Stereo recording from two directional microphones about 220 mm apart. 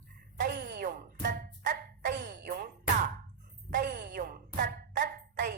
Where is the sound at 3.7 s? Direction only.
50° right (ahead or behind).